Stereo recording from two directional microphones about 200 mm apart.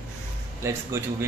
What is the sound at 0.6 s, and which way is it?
Speech, 15° right (ahead or behind).